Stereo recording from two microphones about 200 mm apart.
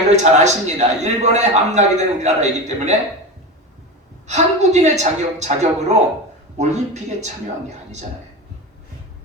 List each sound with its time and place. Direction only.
0.2 s a man's voice: 35° right (ahead or behind)
4.3 s a man's voice: 35° right (ahead or behind)